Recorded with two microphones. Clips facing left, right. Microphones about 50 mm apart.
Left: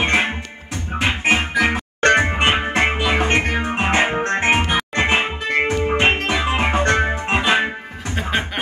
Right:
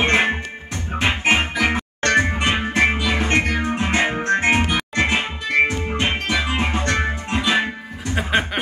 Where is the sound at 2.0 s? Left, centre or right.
Left.